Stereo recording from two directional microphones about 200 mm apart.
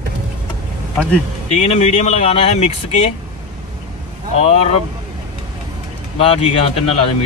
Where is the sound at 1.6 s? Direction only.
35° left (ahead or behind).